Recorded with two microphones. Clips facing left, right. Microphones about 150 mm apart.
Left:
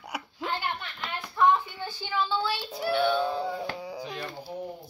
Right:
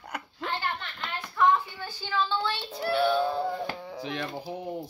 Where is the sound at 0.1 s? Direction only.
10° left (ahead or behind).